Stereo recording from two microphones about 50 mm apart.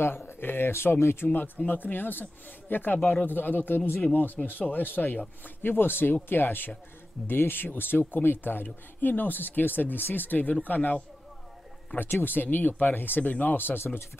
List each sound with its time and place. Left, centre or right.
0.4 s speech: left
1.7 s speech: left
4.0 s speech: left
12.0 s speech: left